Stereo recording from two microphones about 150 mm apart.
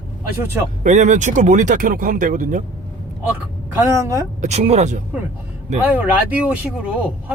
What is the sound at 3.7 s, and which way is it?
Speech, 20° right (ahead or behind).